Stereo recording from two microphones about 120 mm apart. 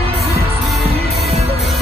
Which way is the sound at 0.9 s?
60° right (ahead or behind).